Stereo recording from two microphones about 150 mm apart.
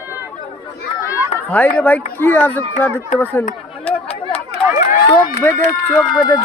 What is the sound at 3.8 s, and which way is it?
Chatter, 40° left (ahead or behind).